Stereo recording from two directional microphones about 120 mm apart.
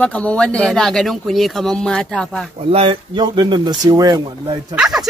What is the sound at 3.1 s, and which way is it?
Speech, 40° right (ahead or behind).